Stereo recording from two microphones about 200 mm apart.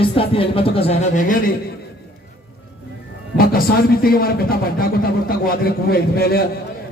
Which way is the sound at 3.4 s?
45° left (ahead or behind).